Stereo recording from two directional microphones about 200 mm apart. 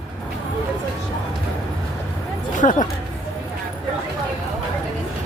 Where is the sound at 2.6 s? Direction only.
40° left (ahead or behind).